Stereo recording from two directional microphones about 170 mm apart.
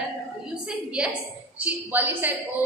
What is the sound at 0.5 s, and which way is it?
A woman's voice, 5° right (ahead or behind).